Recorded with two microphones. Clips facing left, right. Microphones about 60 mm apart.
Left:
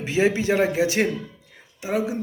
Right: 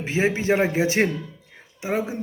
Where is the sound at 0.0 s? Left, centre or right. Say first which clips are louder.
Left 2 dB; right.